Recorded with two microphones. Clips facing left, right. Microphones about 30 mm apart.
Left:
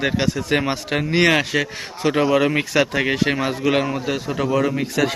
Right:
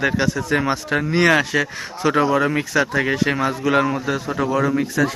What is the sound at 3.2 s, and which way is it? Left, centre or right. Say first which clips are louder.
Speech: right 1 dB; centre.